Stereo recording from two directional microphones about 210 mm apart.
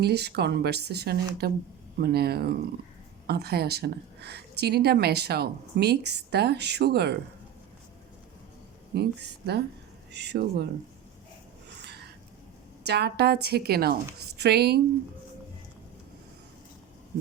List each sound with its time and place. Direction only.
0.0 s a woman's voice: 50° right (ahead or behind)
8.9 s a woman's voice: 50° right (ahead or behind)
12.8 s a woman's voice: 50° right (ahead or behind)